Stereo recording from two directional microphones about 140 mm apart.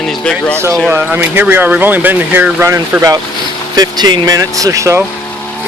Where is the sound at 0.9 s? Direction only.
15° right (ahead or behind).